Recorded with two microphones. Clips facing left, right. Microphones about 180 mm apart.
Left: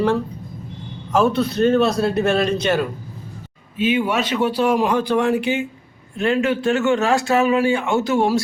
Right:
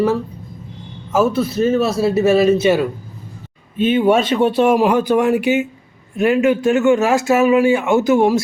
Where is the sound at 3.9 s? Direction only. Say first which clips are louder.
Right 10 dB; 25° right (ahead or behind).